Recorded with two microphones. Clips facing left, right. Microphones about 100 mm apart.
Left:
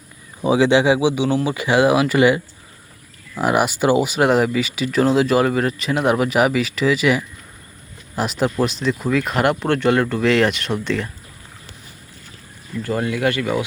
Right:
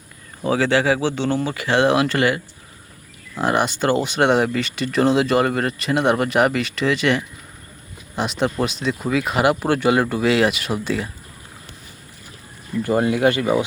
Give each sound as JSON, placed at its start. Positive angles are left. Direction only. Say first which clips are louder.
{"t": 0.4, "sound": "speech", "louder": "left 3 dB", "side_deg": 15}
{"t": 12.8, "sound": "speech", "louder": "right 3 dB", "side_deg": -20}